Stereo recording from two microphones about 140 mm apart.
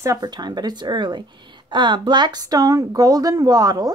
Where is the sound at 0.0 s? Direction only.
25° right (ahead or behind).